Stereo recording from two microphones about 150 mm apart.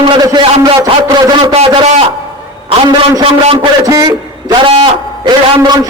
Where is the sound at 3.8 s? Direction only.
25° right (ahead or behind).